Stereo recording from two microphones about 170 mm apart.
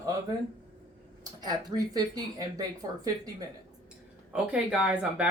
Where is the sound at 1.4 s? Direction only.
25° right (ahead or behind).